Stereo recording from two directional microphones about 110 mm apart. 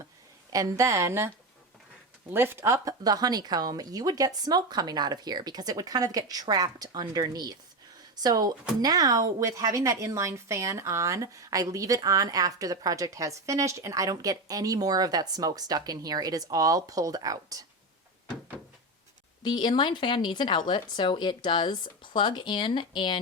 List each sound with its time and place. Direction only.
0.5 s a woman's voice: 30° right (ahead or behind)
2.3 s a woman's voice: 20° right (ahead or behind)
19.4 s speech: 40° left (ahead or behind)